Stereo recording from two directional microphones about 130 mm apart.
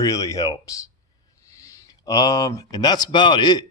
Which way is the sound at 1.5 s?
25° left (ahead or behind).